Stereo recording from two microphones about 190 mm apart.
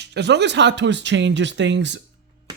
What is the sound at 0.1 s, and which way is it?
Speech, 65° right (ahead or behind).